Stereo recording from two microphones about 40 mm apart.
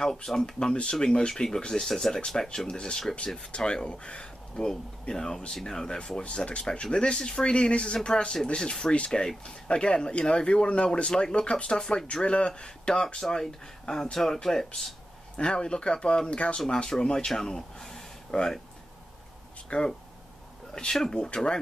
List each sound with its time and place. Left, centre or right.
0.0 s speech: centre
3.5 s speech: left
12.1 s speech: left
16.6 s speech: centre
19.7 s speech: left
20.9 s speech: centre